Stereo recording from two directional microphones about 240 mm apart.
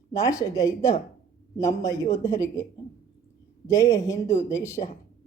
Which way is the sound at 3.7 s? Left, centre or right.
Centre.